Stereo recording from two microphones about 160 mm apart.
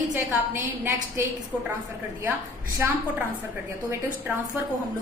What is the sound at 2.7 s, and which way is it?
Speech, 15° right (ahead or behind).